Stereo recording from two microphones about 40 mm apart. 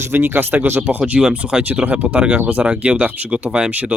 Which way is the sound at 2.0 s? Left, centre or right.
Right.